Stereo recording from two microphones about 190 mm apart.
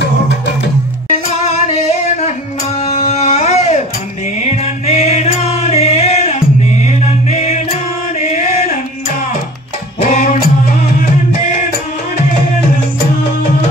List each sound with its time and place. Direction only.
1.0 s music: 35° left (ahead or behind)
2.8 s a sound: 35° left (ahead or behind)
4.8 s music: 35° left (ahead or behind)
10.0 s music: 40° left (ahead or behind)